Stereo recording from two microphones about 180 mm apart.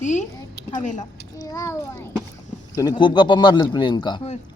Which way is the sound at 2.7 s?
25° left (ahead or behind).